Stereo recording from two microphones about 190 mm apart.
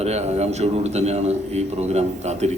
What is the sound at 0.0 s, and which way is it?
A man's voice, 35° right (ahead or behind).